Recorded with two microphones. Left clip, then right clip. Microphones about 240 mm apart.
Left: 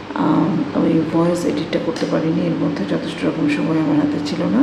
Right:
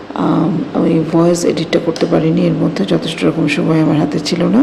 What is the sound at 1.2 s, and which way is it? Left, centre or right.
Speech, right.